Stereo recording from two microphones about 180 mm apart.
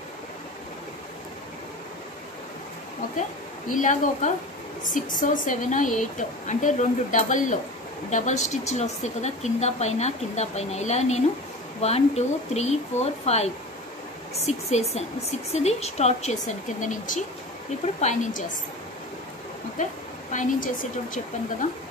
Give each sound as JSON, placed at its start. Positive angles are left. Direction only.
{"t": 3.6, "sound": "a woman's voice", "side_deg": 45}
{"t": 19.8, "sound": "a woman's voice", "side_deg": 45}